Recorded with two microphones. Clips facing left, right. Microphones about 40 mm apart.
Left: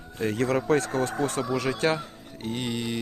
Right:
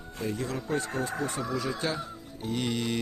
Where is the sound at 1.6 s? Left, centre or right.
Left.